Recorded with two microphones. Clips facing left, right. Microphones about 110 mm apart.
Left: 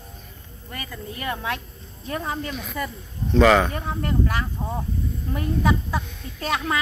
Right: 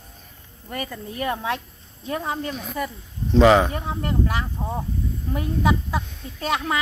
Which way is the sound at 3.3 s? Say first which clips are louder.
Right 1 dB; 20° right (ahead or behind).